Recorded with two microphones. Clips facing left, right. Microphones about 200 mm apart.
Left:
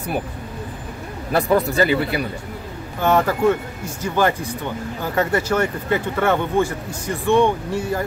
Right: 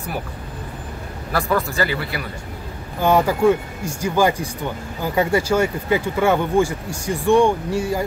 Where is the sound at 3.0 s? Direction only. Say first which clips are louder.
Right 1 dB; 10° right (ahead or behind).